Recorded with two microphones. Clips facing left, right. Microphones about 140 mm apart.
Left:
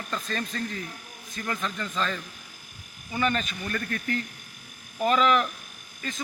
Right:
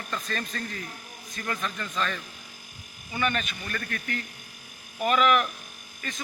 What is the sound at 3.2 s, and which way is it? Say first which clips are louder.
Speech: left 2 dB; 30° left (ahead or behind).